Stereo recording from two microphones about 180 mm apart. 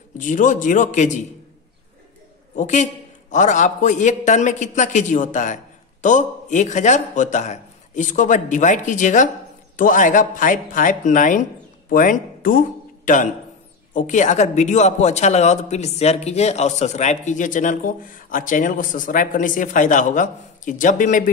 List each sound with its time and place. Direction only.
0.2 s speech: 45° left (ahead or behind)
2.5 s speech: 45° left (ahead or behind)